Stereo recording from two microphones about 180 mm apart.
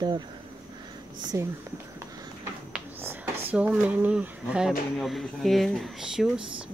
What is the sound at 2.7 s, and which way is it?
Speech, 10° right (ahead or behind).